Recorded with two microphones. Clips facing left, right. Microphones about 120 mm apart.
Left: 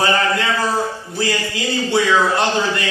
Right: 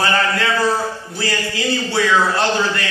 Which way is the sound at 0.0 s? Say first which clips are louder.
Left 1 dB; 20° left (ahead or behind).